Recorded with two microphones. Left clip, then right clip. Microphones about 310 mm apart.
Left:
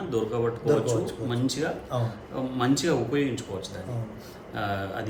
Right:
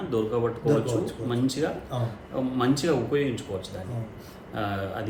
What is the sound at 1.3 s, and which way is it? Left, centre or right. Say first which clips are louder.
Speech: right 3 dB; centre.